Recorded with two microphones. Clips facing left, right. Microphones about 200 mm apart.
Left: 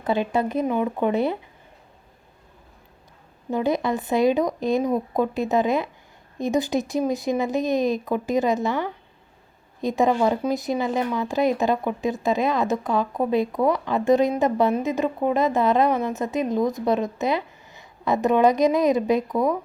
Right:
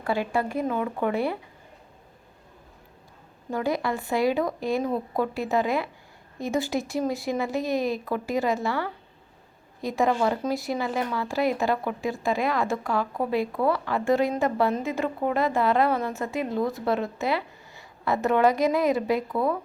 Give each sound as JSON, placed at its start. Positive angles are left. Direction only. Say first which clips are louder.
{"t": 0.0, "sound": "speech", "louder": "left 3 dB", "side_deg": 20}
{"t": 3.5, "sound": "speech", "louder": "left 4 dB", "side_deg": 20}